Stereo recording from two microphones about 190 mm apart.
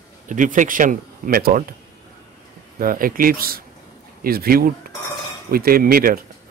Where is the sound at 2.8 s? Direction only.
50° right (ahead or behind).